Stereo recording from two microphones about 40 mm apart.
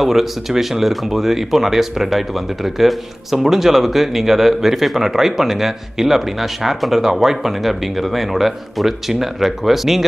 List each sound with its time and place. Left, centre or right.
0.0 s speech: centre